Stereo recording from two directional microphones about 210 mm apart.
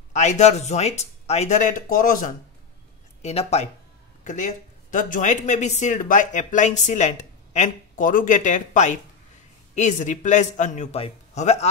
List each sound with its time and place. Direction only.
0.1 s speech: 35° left (ahead or behind)